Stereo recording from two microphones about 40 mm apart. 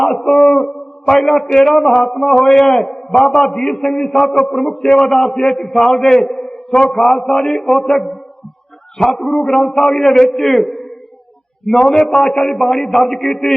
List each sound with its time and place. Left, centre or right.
0.0 s a man's voice: centre